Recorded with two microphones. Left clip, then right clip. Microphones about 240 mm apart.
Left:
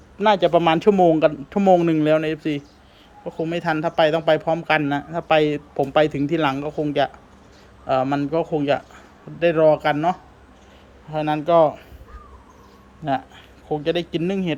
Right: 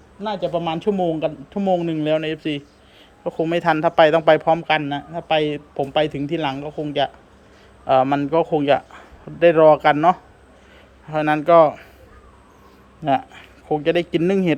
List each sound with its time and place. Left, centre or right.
0.2 s speech: centre
13.1 s speech: centre